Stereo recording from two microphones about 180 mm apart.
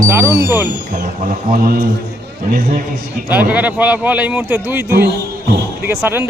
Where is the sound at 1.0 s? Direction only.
45° right (ahead or behind).